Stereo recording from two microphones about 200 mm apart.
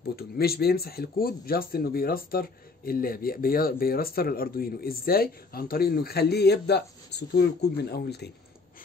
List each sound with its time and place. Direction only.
0.0 s speech: 50° left (ahead or behind)